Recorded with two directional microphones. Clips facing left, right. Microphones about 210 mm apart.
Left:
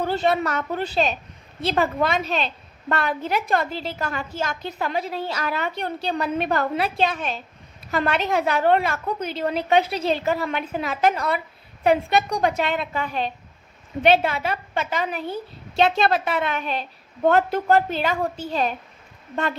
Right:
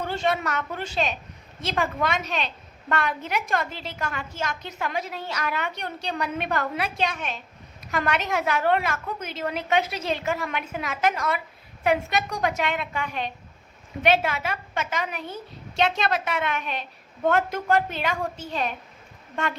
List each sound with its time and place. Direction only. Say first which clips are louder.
0.0 s a woman's voice: left 4 dB; 35° left (ahead or behind)